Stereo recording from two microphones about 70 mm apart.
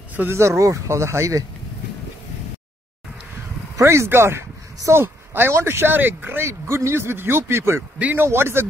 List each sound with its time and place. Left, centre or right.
0.3 s speech: right
3.7 s speech: right
6.4 s speech: right
8.0 s speech: right